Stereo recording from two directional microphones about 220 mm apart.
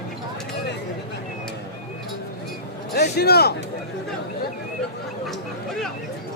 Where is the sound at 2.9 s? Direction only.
45° left (ahead or behind).